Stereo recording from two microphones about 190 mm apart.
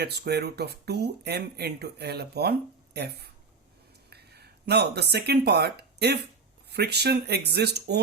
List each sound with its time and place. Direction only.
0.0 s speech: 60° right (ahead or behind)